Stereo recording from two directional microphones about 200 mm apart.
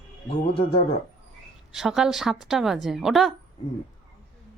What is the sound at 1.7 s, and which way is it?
A woman's voice, centre (ahead or behind).